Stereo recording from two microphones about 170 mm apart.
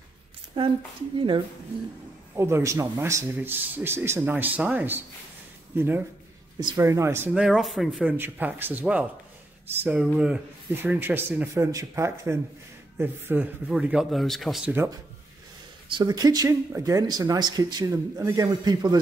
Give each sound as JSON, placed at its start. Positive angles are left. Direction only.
{"t": 0.6, "sound": "a woman's voice", "side_deg": -30}
{"t": 2.3, "sound": "speech", "side_deg": -15}
{"t": 7.4, "sound": "speech", "side_deg": 0}
{"t": 15.9, "sound": "speech", "side_deg": -25}